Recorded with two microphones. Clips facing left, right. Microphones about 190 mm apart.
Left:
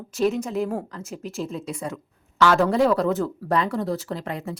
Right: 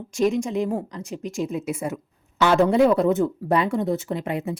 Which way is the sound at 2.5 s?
Centre (ahead or behind).